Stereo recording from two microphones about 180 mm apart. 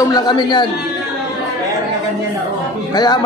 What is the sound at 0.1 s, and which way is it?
Speech, 25° left (ahead or behind).